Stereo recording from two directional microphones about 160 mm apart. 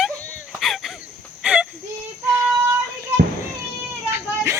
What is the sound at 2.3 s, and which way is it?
Child singing, 15° right (ahead or behind).